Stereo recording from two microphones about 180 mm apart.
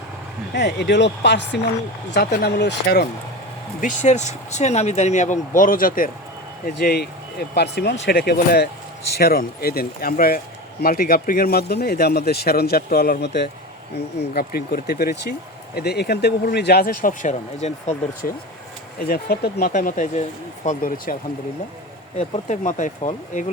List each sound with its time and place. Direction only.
0.5 s speech: 70° left (ahead or behind)
3.8 s speech: 45° left (ahead or behind)
18.9 s speech: 55° left (ahead or behind)
22.2 s speech: 45° left (ahead or behind)